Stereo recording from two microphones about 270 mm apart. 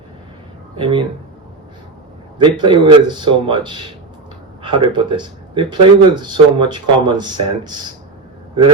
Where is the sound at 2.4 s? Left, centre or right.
Centre.